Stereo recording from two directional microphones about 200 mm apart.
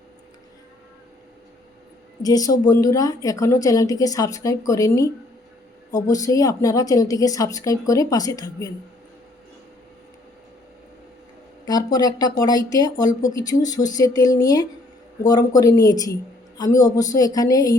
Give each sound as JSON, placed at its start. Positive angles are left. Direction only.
{"t": 2.2, "sound": "a woman's voice", "side_deg": 20}
{"t": 11.6, "sound": "a woman's voice", "side_deg": 20}